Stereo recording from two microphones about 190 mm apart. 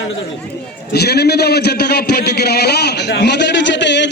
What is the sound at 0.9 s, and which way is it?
A man's voice, 60° left (ahead or behind).